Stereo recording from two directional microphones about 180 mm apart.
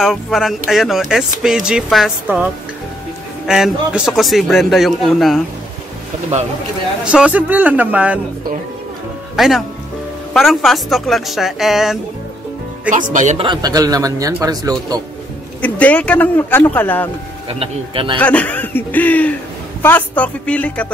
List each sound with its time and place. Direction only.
0.0 s a man's voice: centre (ahead or behind)
7.1 s a man's voice: 5° right (ahead or behind)
9.4 s a man's voice: centre (ahead or behind)
12.9 s speech: 45° right (ahead or behind)
13.4 s speech: 25° right (ahead or behind)
15.6 s speech: 10° left (ahead or behind)
17.5 s speech: 30° right (ahead or behind)
18.2 s speech: 10° left (ahead or behind)